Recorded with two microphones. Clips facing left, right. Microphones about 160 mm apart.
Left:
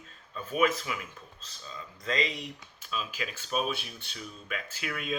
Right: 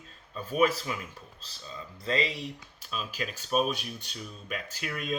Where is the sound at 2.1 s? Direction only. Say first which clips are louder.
Right 2 dB; 30° right (ahead or behind).